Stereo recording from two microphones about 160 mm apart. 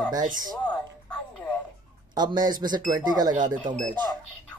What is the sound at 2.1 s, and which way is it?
Speech, 25° right (ahead or behind).